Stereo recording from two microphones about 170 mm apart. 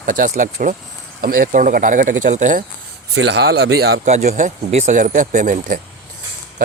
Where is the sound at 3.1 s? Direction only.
90° right; by 4.0 s 70° right (ahead or behind).